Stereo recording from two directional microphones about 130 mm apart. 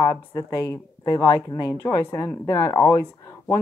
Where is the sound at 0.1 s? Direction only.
25° left (ahead or behind).